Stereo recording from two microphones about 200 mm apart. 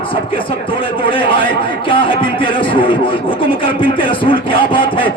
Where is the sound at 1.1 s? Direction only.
25° left (ahead or behind).